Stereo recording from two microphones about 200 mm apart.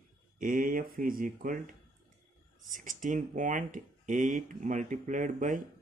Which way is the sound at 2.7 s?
40° right (ahead or behind).